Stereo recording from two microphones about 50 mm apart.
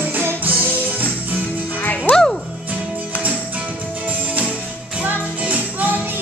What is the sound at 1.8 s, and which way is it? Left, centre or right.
Music, left.